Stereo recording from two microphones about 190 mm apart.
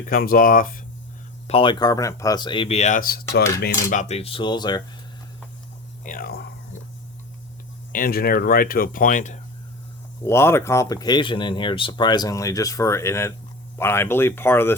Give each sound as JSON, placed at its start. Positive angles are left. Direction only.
{"t": 0.1, "sound": "speech", "side_deg": 50}
{"t": 1.5, "sound": "speech", "side_deg": 30}
{"t": 3.6, "sound": "cutlery", "side_deg": 40}
{"t": 6.0, "sound": "speech", "side_deg": 45}
{"t": 7.9, "sound": "speech", "side_deg": 50}
{"t": 10.2, "sound": "speech", "side_deg": 15}